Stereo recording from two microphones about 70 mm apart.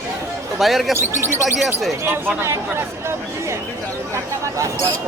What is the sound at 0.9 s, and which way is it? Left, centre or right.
Speech, right.